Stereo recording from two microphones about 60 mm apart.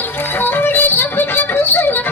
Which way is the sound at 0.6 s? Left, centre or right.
Left.